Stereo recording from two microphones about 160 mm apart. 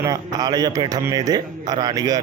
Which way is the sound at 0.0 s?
20° right (ahead or behind).